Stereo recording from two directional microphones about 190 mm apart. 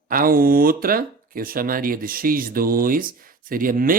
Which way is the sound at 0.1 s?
50° right (ahead or behind).